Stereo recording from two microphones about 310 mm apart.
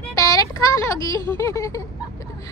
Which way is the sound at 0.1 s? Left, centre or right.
Centre.